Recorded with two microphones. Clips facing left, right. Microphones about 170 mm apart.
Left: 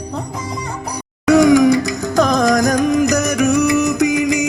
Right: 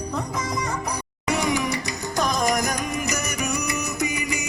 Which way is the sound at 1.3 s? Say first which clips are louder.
Left 14 dB; 90° left.